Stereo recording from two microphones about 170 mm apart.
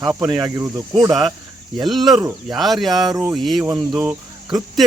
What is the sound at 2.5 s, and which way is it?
Speech, centre (ahead or behind).